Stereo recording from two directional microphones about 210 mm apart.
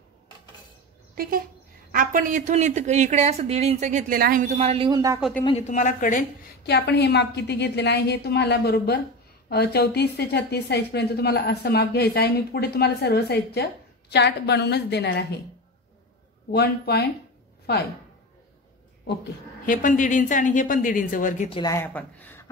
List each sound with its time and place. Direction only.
1.1 s speech: 45° right (ahead or behind); by 5.2 s 15° right (ahead or behind)
5.4 s a woman's voice: 30° left (ahead or behind); by 15.2 s 55° left (ahead or behind)
16.5 s a woman's voice: 50° left (ahead or behind)
19.6 s a woman's voice: 40° left (ahead or behind)
21.5 s speech: 25° left (ahead or behind)
21.7 s speech: 10° left (ahead or behind)